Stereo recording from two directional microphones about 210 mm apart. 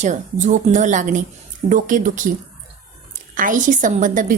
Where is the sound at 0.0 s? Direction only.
35° right (ahead or behind).